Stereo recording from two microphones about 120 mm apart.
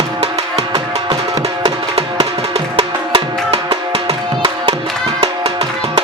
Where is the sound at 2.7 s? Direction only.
55° right (ahead or behind).